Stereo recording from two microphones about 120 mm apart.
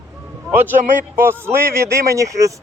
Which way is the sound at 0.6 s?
15° right (ahead or behind).